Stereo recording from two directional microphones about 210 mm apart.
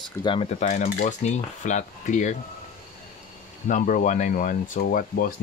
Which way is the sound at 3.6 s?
40° left (ahead or behind).